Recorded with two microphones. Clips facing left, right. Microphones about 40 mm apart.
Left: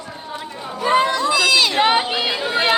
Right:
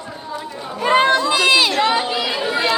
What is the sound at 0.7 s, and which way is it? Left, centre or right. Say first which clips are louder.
Chatter: right 2 dB; right.